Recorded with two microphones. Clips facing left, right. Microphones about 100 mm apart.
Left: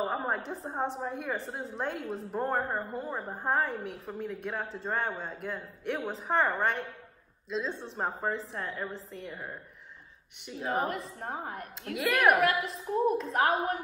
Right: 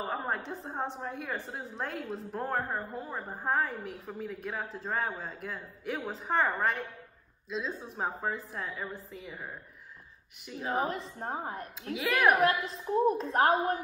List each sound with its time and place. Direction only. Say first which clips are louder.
0.0 s a woman's voice: left 3 dB; centre (ahead or behind)
11.1 s a woman's voice: right 1 dB; 30° right (ahead or behind)
11.9 s a woman's voice: left 1 dB; centre (ahead or behind)
13.2 s a woman's voice: right 2 dB; 35° right (ahead or behind)